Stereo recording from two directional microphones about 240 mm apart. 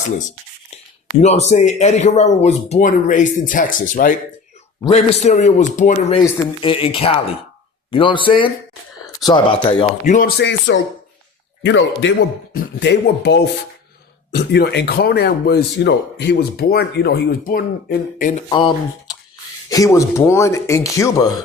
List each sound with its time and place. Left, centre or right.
1.2 s speech: left
18.4 s speech: centre